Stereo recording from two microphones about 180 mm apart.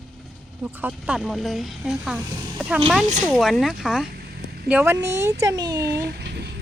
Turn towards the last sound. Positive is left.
turn(degrees=-65)  # may be behind; listen again after turning